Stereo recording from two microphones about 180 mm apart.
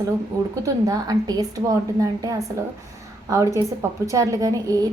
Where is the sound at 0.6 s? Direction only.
20° right (ahead or behind).